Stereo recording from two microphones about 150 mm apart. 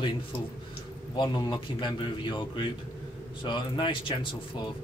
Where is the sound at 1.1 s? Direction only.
30° left (ahead or behind).